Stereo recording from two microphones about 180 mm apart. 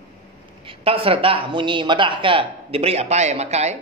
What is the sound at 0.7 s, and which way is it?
A man's voice, 30° right (ahead or behind).